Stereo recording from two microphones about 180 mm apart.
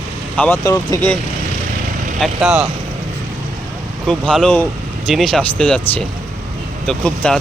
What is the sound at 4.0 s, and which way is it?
Speech, centre (ahead or behind).